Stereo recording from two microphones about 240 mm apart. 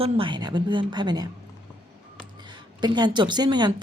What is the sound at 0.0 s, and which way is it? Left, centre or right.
A woman's voice, right.